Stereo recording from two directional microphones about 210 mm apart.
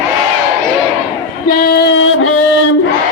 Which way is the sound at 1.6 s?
50° left (ahead or behind).